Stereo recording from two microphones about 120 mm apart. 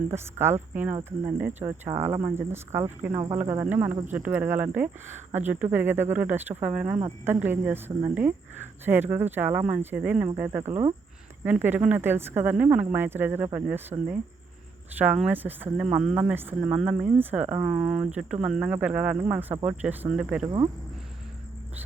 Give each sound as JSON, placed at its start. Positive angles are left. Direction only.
{"t": 0.1, "sound": "speech", "side_deg": -20}
{"t": 14.9, "sound": "speech", "side_deg": -10}